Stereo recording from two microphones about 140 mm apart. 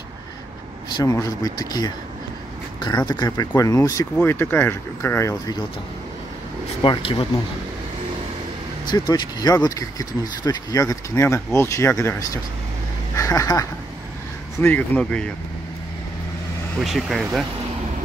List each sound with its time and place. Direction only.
0.8 s speech: 30° left (ahead or behind)
3.1 s speech: 30° left (ahead or behind)
6.8 s speech: 40° left (ahead or behind)
8.9 s speech: 30° left (ahead or behind)
14.6 s speech: 10° left (ahead or behind)
16.8 s speech: centre (ahead or behind)